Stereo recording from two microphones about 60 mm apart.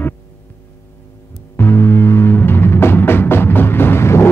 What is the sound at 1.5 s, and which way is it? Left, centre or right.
Music, left.